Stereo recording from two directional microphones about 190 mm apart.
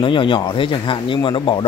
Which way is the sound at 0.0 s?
25° left (ahead or behind).